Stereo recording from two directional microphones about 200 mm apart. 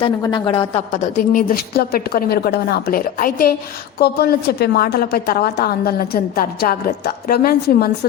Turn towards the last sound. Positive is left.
turn(degrees=50)  # may be behind; listen again after turning